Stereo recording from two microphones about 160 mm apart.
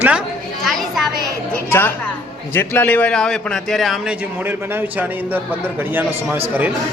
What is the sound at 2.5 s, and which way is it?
A man's voice, 15° left (ahead or behind).